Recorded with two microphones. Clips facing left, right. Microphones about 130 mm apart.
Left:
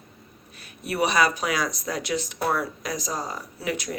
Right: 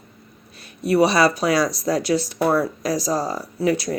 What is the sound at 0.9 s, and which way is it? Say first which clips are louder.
Speech: right 6 dB; 30° right (ahead or behind).